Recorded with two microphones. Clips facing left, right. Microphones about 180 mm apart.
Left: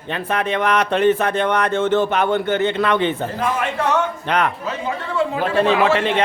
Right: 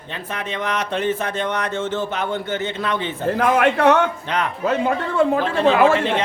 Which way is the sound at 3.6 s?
65° right (ahead or behind).